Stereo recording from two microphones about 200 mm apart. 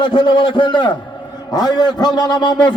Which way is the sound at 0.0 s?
25° left (ahead or behind).